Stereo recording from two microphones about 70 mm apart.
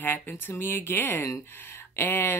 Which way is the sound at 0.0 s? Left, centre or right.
Left.